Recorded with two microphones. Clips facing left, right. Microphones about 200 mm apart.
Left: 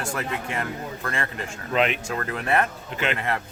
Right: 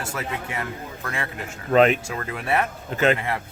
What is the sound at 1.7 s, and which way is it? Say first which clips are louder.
Speech: right 6 dB; 40° right (ahead or behind).